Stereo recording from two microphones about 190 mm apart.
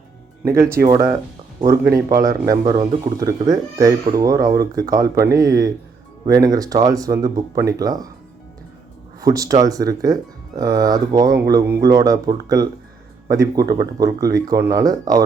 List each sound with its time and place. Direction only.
0.6 s speech: 15° right (ahead or behind)
9.2 s speech: 20° right (ahead or behind)